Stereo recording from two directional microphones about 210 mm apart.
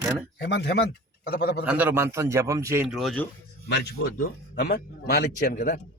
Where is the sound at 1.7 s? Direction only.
10° right (ahead or behind).